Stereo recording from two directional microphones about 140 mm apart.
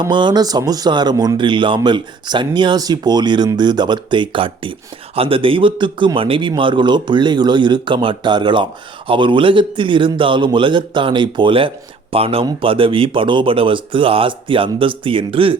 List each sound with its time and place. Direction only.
0.0 s speech: 35° right (ahead or behind)